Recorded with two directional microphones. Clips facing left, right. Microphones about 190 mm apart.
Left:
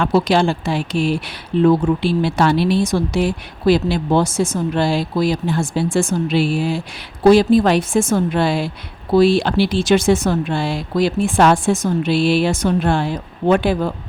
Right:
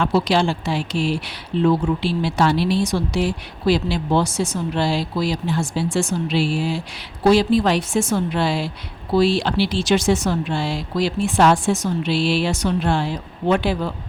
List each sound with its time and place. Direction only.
0.0 s speech: 50° left (ahead or behind)